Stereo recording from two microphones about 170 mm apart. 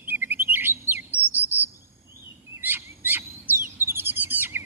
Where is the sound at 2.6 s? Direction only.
10° right (ahead or behind).